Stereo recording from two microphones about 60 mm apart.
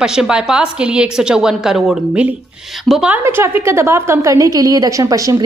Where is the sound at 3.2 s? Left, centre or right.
Right.